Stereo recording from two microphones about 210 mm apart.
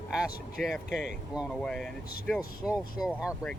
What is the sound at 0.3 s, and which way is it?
Speech, 45° left (ahead or behind).